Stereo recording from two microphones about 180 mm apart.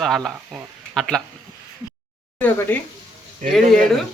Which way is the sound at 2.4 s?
10° left (ahead or behind).